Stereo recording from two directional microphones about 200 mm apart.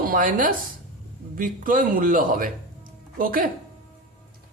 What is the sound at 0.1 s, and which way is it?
A man's voice, 45° right (ahead or behind).